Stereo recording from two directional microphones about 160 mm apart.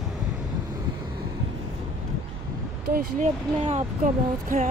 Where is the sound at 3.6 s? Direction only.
45° right (ahead or behind).